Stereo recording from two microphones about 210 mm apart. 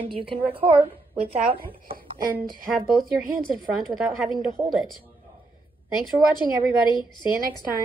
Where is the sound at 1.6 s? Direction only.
45° right (ahead or behind).